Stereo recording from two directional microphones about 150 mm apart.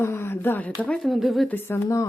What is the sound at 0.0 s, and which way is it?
Speech, 15° left (ahead or behind).